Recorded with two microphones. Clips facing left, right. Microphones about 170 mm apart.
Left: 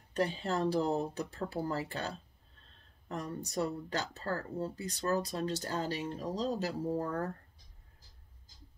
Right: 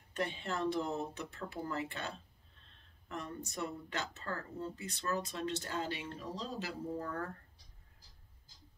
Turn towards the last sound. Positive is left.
turn(degrees=40)  # may be behind; listen again after turning